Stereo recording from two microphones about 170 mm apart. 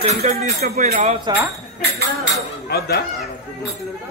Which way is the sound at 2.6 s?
65° left (ahead or behind).